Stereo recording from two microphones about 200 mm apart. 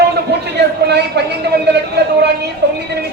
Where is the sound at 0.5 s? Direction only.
55° right (ahead or behind).